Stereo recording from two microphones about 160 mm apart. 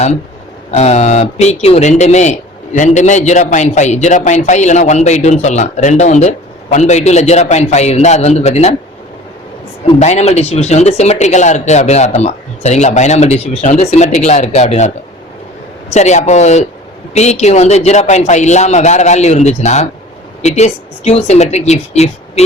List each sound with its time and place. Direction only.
0.7 s a man's voice: 45° left (ahead or behind)
10.0 s a man's voice: 45° left (ahead or behind)